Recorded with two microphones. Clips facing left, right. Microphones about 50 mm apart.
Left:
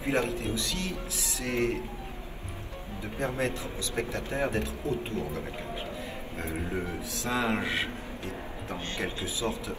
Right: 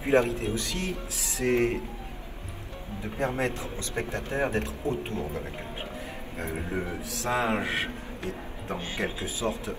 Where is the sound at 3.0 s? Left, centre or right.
Right.